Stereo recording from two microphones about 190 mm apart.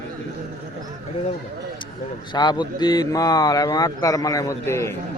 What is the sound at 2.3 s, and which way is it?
Speech, 20° left (ahead or behind).